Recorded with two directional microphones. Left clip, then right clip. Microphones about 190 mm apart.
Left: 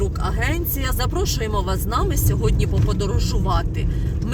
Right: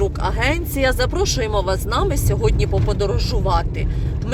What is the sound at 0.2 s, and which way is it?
Speech, 25° right (ahead or behind).